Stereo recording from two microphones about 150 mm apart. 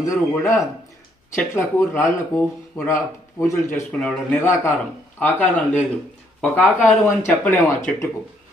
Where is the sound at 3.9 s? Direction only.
10° left (ahead or behind).